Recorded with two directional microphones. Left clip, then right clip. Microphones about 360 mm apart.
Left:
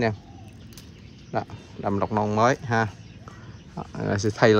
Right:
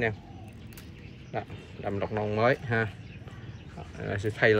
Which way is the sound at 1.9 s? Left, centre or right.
Left.